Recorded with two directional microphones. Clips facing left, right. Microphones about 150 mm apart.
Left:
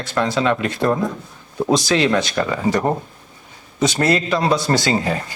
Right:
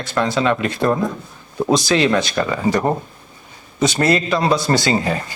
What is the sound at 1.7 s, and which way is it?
Speech, 5° right (ahead or behind).